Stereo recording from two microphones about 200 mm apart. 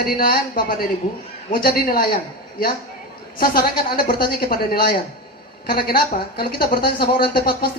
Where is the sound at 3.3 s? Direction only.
45° left (ahead or behind).